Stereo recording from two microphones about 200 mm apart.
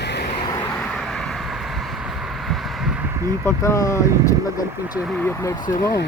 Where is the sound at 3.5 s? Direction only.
15° left (ahead or behind).